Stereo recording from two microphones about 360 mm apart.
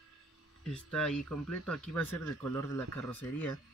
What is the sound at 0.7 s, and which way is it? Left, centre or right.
Speech, centre.